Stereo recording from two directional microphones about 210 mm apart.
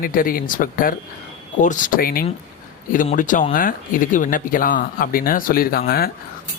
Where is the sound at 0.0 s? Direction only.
40° left (ahead or behind).